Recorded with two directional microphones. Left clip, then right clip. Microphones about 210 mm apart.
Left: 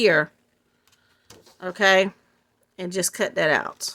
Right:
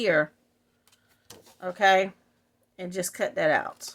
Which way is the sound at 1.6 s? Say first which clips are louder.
Left 3 dB; 45° left (ahead or behind).